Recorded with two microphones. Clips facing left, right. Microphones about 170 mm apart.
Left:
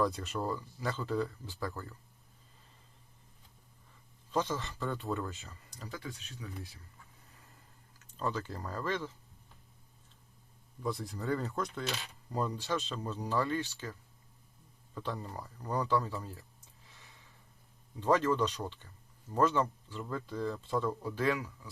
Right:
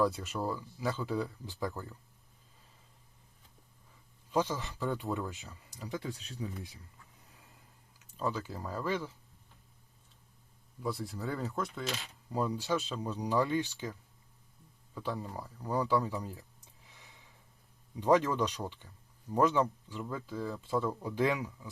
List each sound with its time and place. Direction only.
0.0 s speech: 5° right (ahead or behind)
4.3 s speech: 10° right (ahead or behind)
5.9 s speech: 30° right (ahead or behind)
7.9 s speech: 10° right (ahead or behind)
10.8 s speech: centre (ahead or behind)
14.9 s speech: 10° right (ahead or behind)
18.0 s speech: 15° right (ahead or behind)